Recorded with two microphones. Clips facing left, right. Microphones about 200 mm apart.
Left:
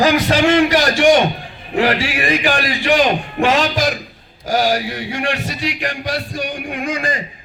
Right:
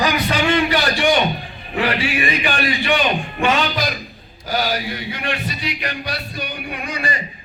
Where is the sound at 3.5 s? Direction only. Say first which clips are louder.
Left 4 dB; 85° left.